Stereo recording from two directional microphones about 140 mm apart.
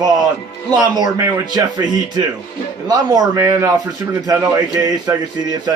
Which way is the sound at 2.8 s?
25° right (ahead or behind).